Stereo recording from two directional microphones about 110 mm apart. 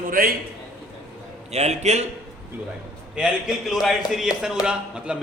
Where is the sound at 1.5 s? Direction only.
90° right.